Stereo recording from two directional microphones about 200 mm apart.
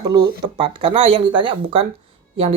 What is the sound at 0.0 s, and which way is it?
Speech, 20° right (ahead or behind).